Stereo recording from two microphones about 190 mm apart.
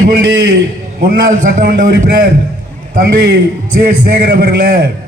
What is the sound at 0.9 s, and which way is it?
A man's voice, 45° right (ahead or behind).